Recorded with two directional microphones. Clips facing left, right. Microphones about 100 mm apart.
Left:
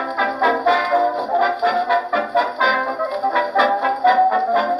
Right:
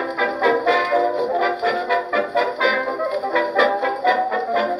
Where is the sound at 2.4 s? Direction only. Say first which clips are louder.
Left 2 dB; 35° left (ahead or behind).